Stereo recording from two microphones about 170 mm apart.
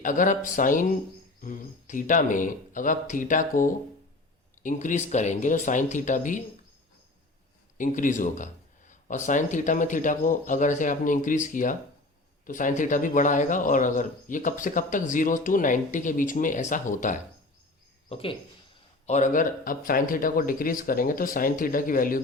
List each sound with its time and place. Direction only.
0.0 s speech: 50° left (ahead or behind)
7.8 s speech: 50° left (ahead or behind)
18.1 s speech: 35° left (ahead or behind)
19.0 s speech: 45° left (ahead or behind)